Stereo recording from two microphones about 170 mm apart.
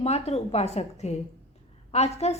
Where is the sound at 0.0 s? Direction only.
40° left (ahead or behind).